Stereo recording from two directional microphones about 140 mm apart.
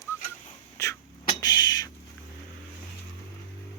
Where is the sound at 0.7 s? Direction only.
20° left (ahead or behind).